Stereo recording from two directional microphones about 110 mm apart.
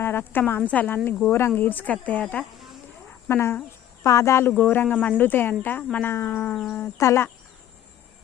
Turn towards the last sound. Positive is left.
turn(degrees=25)  # may be behind; listen again after turning